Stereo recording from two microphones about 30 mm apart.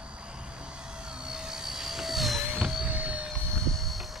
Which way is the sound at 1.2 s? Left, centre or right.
Centre.